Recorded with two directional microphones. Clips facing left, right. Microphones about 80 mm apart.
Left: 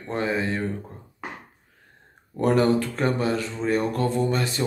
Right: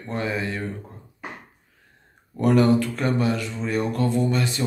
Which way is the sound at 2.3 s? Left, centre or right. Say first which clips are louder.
Right 2 dB; left.